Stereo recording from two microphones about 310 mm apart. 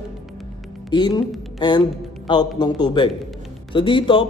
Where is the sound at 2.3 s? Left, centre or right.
Centre.